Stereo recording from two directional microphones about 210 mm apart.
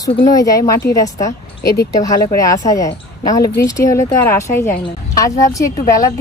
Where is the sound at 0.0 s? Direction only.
15° left (ahead or behind).